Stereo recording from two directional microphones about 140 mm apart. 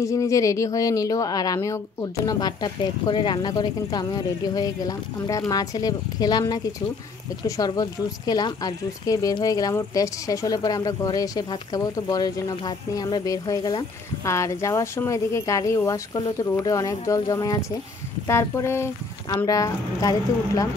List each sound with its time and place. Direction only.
0.0 s speech: 25° left (ahead or behind)